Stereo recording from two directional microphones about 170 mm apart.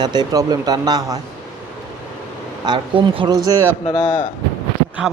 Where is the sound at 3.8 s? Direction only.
30° left (ahead or behind).